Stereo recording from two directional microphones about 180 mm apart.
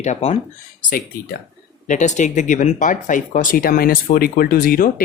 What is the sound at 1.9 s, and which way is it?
Speech, 40° left (ahead or behind).